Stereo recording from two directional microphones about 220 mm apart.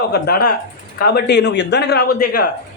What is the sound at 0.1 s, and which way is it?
A man's voice, 45° left (ahead or behind).